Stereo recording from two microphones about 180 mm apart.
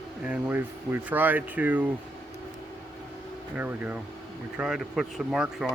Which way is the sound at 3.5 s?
10° right (ahead or behind).